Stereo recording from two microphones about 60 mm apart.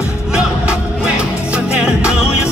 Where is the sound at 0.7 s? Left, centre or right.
Centre.